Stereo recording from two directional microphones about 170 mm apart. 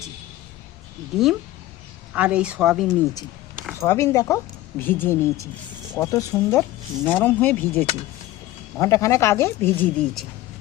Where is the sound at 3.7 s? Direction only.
15° left (ahead or behind).